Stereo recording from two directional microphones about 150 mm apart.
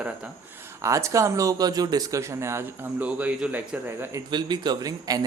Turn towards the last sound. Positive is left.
turn(degrees=-25)  # may be behind; listen again after turning